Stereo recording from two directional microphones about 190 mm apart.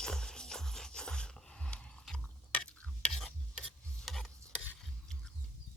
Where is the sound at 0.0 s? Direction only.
5° left (ahead or behind).